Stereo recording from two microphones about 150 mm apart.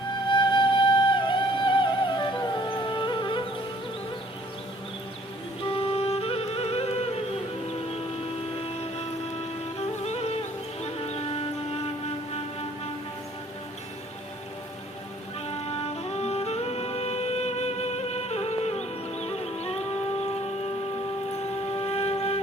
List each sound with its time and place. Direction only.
0.3 s music: 30° left (ahead or behind)
5.6 s music: 40° left (ahead or behind)
8.5 s music: 40° left (ahead or behind)
15.4 s music: 45° left (ahead or behind)
21.8 s wind instrument: 40° left (ahead or behind)